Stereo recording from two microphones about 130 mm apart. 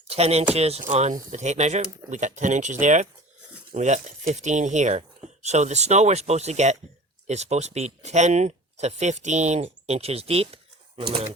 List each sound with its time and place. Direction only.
0.1 s speech: 50° right (ahead or behind)